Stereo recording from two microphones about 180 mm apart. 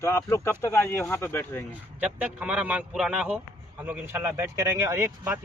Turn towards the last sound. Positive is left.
turn(degrees=-15)  # may be behind; listen again after turning